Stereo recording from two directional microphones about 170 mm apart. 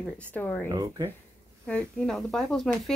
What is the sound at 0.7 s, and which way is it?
Speech, 20° right (ahead or behind).